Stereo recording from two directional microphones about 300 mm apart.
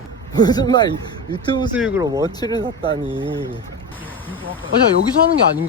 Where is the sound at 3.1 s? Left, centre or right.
Centre.